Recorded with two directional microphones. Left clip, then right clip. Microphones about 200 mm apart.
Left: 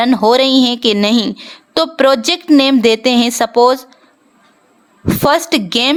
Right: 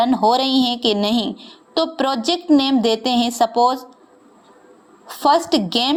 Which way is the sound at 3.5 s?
30° left (ahead or behind).